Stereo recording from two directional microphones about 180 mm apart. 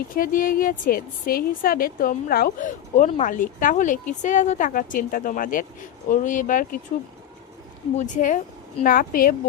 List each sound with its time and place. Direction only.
0.1 s a woman's voice: 50° left (ahead or behind)
7.9 s a woman's voice: 45° left (ahead or behind)